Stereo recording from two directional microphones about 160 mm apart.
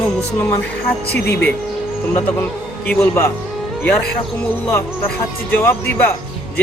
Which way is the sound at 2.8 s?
20° left (ahead or behind).